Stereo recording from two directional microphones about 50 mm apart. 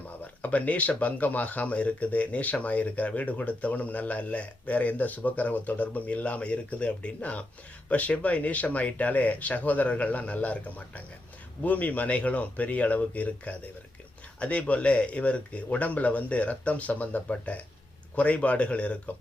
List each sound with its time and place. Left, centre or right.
0.4 s speech: left